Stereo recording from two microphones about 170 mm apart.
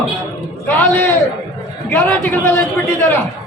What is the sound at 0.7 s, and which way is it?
A man's voice, 10° left (ahead or behind).